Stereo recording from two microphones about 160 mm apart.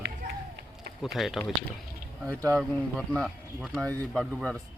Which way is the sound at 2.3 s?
20° right (ahead or behind).